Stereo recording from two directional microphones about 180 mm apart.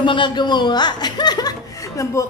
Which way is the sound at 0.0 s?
25° left (ahead or behind).